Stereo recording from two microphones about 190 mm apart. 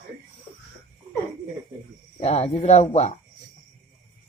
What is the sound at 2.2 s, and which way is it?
Speech, 35° left (ahead or behind).